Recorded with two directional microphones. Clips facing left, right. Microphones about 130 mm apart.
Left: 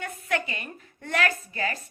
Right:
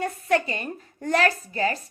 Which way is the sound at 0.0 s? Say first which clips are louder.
Right 6 dB; 35° right (ahead or behind).